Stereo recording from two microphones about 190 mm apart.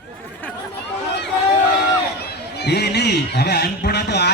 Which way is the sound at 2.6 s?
60° left (ahead or behind).